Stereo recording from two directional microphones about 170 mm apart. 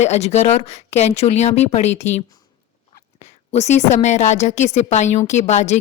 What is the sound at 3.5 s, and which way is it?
A woman's voice, 40° left (ahead or behind).